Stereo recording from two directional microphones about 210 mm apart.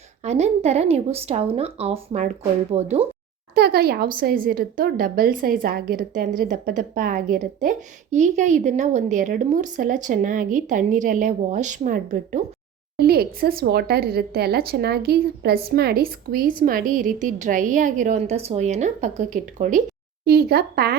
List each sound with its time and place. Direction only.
0.2 s speech: 30° right (ahead or behind)
3.5 s a woman's voice: 50° right (ahead or behind)
20.2 s a woman's voice: 50° right (ahead or behind)